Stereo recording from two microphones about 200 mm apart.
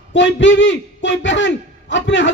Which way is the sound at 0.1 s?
65° left (ahead or behind).